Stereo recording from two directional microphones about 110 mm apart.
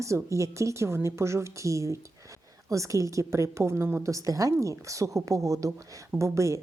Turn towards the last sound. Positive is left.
turn(degrees=-25)  # may be behind; listen again after turning